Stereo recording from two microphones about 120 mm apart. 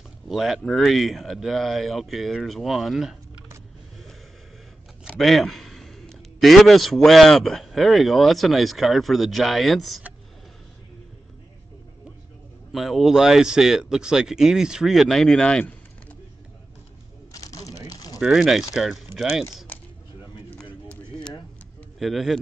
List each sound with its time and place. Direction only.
0.3 s speech: centre (ahead or behind)
5.0 s a man's voice: centre (ahead or behind)
12.7 s speech: centre (ahead or behind)
17.3 s a sound: 30° left (ahead or behind)
18.2 s speech: centre (ahead or behind)
21.9 s speech: centre (ahead or behind)